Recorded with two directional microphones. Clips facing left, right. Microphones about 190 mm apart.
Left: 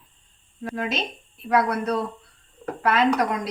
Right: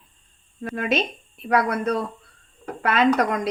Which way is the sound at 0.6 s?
60° right (ahead or behind).